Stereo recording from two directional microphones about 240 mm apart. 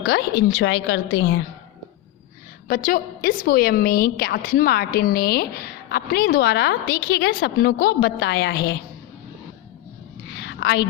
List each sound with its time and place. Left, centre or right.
0.0 s a woman's voice: left
2.6 s a woman's voice: left
10.4 s a sound: left